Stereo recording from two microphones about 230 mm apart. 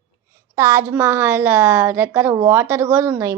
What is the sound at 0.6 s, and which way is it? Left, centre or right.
A woman's voice, centre.